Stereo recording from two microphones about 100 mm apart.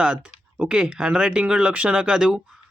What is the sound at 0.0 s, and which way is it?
Speech, 10° right (ahead or behind).